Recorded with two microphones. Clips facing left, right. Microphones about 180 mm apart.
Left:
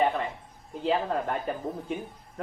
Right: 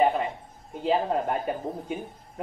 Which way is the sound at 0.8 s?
25° right (ahead or behind).